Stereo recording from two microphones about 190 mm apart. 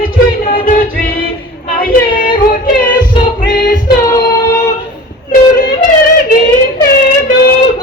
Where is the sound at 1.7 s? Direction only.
50° left (ahead or behind).